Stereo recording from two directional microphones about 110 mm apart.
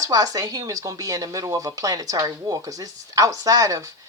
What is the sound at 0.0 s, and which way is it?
Speech, 35° right (ahead or behind).